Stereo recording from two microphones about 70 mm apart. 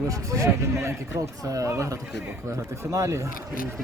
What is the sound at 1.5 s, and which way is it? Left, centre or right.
Speech, right.